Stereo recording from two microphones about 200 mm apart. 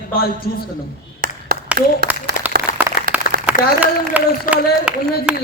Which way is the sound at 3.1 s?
45° right (ahead or behind).